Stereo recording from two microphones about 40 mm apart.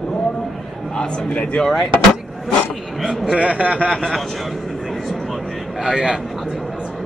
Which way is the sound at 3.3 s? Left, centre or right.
Right.